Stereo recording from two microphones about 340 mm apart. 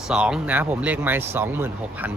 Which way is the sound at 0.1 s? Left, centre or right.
Centre.